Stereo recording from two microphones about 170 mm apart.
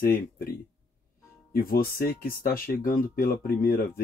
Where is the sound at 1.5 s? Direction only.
60° left (ahead or behind).